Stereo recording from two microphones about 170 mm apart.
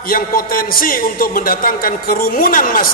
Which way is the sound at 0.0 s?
55° left (ahead or behind).